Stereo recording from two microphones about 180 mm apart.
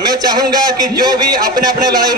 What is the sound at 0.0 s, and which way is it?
A man's voice, 20° right (ahead or behind).